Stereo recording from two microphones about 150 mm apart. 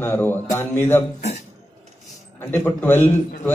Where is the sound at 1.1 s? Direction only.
50° left (ahead or behind).